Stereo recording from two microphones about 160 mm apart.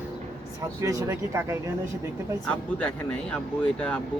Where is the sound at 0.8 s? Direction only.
20° right (ahead or behind).